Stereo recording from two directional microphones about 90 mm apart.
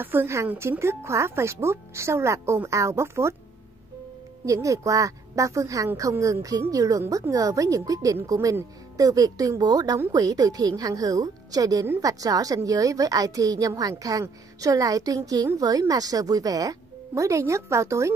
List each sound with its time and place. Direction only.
0.0 s a woman's voice: 25° right (ahead or behind)
4.5 s a woman's voice: 35° right (ahead or behind)